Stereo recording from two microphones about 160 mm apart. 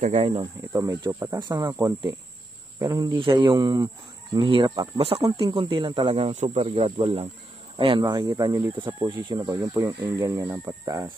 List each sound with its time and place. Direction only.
0.0 s speech: 40° right (ahead or behind)
0.7 s speech: 20° right (ahead or behind)
9.5 s speech: 15° right (ahead or behind)